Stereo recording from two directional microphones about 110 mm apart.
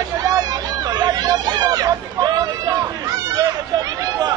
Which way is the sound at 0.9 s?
40° right (ahead or behind).